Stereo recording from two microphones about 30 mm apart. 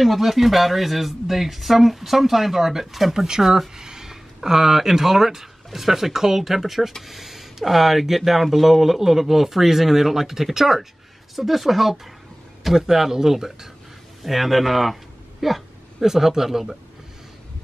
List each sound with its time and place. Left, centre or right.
0.0 s speech: centre
3.8 s a sound: right
4.1 s speech: centre
12.7 s speech: centre
14.2 s speech: centre